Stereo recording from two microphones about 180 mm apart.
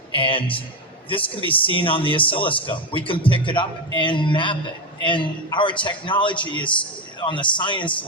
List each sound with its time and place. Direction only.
0.1 s a man's voice: 30° left (ahead or behind)